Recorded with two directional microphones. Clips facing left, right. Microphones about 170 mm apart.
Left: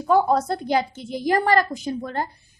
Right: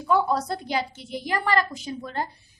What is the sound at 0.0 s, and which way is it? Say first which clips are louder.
A woman's voice: left 4 dB; 50° left (ahead or behind).